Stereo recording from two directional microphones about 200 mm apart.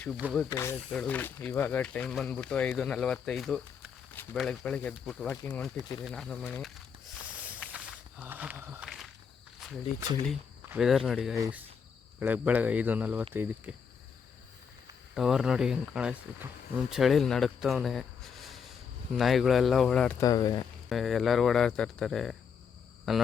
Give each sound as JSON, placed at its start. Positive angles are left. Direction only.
{"t": 0.3, "sound": "speech", "side_deg": 10}
{"t": 6.0, "sound": "snake", "side_deg": 5}
{"t": 10.7, "sound": "speech", "side_deg": 0}
{"t": 15.1, "sound": "speech", "side_deg": 0}
{"t": 20.2, "sound": "speech", "side_deg": 20}
{"t": 20.9, "sound": "speech", "side_deg": 0}